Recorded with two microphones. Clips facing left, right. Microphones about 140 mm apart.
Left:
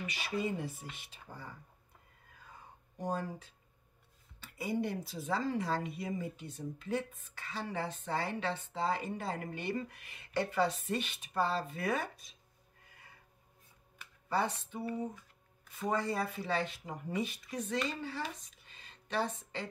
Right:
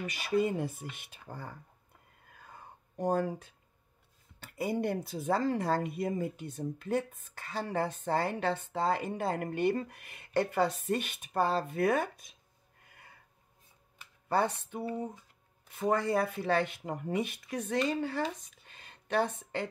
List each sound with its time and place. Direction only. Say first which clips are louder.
0.0 s speech: right 6 dB; 50° right (ahead or behind)
3.0 s speech: right 7 dB; 55° right (ahead or behind)
14.3 s speech: right 4 dB; 55° right (ahead or behind)
18.7 s a sound: right 7 dB; 55° right (ahead or behind)